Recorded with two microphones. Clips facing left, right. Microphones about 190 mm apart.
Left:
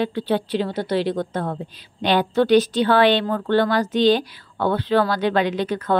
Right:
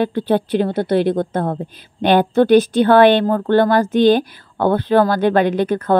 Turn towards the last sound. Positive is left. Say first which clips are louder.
# right 5 dB
turn(degrees=-50)  # may be behind; listen again after turning